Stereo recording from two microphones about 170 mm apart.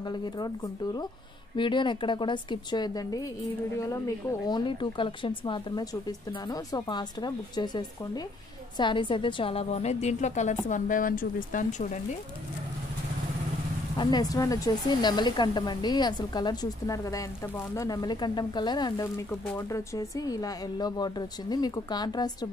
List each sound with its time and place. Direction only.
0.0 s speech: 25° left (ahead or behind)
1.6 s speech: 30° left (ahead or behind)
4.5 s a woman's voice: 25° left (ahead or behind); by 12.0 s 50° left (ahead or behind)
13.9 s speech: 25° left (ahead or behind)